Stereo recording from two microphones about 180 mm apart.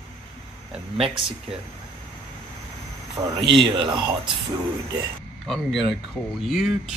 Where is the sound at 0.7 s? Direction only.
5° right (ahead or behind).